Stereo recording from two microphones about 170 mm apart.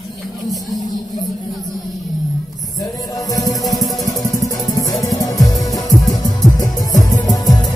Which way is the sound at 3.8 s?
Centre (ahead or behind).